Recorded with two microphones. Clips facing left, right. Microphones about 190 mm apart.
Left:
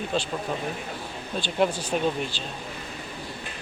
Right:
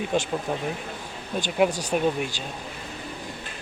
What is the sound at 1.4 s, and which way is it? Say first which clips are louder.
Speech: right 2 dB; 10° right (ahead or behind).